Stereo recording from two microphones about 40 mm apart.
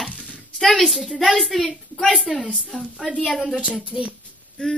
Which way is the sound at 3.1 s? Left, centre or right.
Centre.